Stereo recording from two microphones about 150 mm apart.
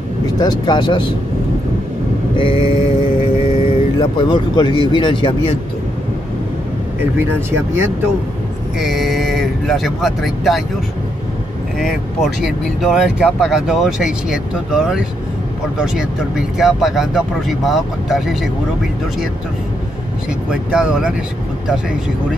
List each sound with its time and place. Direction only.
0.4 s speech: 30° left (ahead or behind)
2.3 s speech: 35° left (ahead or behind)
7.3 s speech: 15° right (ahead or behind)
8.7 s speech: centre (ahead or behind)
12.4 s speech: centre (ahead or behind)
20.4 s speech: 5° right (ahead or behind)